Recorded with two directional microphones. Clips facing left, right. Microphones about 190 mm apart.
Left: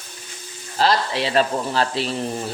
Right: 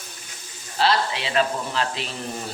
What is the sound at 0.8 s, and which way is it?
Speech, 40° left (ahead or behind).